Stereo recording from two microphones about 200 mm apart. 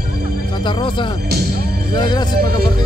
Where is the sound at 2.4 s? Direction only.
50° right (ahead or behind).